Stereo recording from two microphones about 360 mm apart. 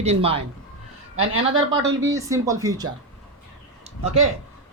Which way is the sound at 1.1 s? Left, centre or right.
Right.